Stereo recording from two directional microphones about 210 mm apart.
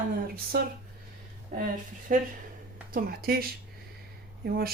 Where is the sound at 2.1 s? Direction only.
40° right (ahead or behind).